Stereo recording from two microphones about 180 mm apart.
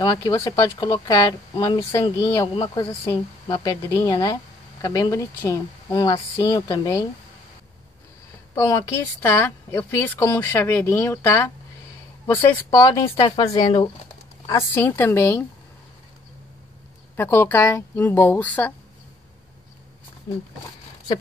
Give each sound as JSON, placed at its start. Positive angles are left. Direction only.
{"t": 0.0, "sound": "speech", "side_deg": 20}
{"t": 8.5, "sound": "a woman's voice", "side_deg": 20}
{"t": 17.2, "sound": "a woman's voice", "side_deg": 10}